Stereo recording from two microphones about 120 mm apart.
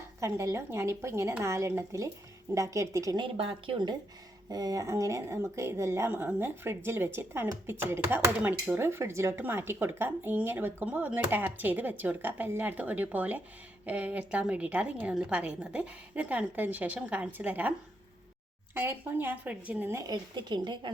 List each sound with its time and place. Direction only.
0.2 s speech: 25° right (ahead or behind)
3.3 s a woman's voice: 40° right (ahead or behind)
4.4 s speech: 30° right (ahead or behind); by 19.9 s 10° right (ahead or behind)
19.9 s speech: 25° right (ahead or behind)
20.3 s a woman's voice: 40° right (ahead or behind)